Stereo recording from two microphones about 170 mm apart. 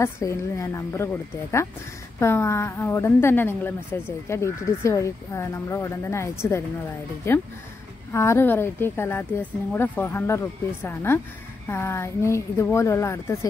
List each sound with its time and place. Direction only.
0.0 s a woman's voice: 15° left (ahead or behind)